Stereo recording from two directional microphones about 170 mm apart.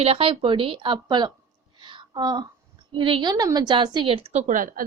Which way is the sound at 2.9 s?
30° right (ahead or behind).